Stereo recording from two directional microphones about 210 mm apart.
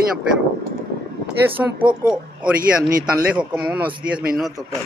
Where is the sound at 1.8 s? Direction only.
5° right (ahead or behind).